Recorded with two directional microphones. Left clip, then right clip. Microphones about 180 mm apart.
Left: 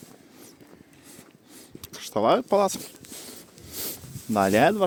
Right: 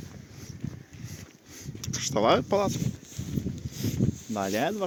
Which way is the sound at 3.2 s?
50° left (ahead or behind).